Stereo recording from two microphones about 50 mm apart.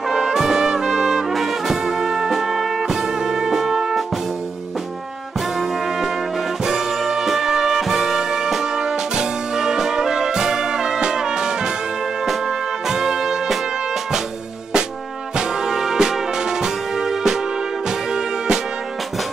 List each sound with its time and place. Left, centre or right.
0.1 s brass instrument: centre
6.6 s music: centre
15.3 s music: centre